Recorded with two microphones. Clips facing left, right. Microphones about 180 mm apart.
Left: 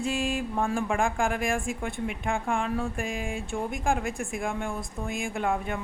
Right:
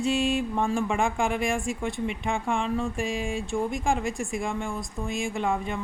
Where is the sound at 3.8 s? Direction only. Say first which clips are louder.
Right 1 dB; centre (ahead or behind).